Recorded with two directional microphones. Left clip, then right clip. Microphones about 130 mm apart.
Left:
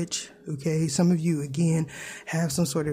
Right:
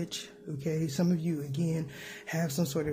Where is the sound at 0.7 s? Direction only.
45° left (ahead or behind).